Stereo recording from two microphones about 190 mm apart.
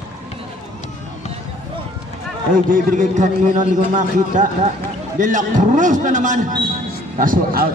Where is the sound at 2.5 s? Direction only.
45° right (ahead or behind).